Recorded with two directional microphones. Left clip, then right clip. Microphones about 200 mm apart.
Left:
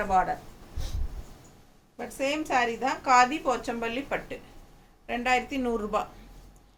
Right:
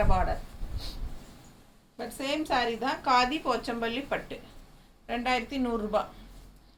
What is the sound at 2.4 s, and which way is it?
A woman's voice, 10° left (ahead or behind).